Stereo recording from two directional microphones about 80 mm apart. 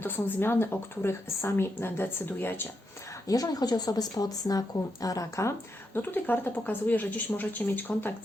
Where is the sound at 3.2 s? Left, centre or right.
Left.